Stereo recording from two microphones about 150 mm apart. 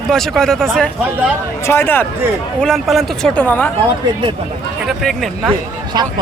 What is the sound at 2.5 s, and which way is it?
Speech, centre (ahead or behind).